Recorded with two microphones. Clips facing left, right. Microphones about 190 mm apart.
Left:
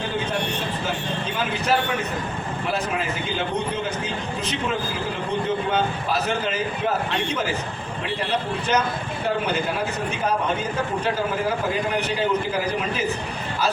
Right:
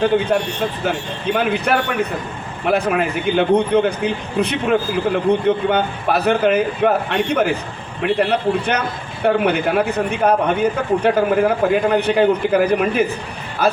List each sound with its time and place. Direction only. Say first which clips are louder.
0.9 s a man's voice: right 6 dB; 60° right (ahead or behind)